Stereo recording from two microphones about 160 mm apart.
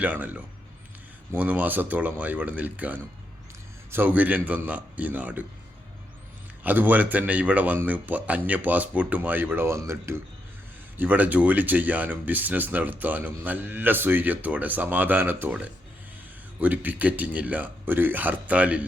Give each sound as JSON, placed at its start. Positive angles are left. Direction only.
{"t": 0.0, "sound": "speech", "side_deg": -10}
{"t": 6.6, "sound": "speech", "side_deg": -10}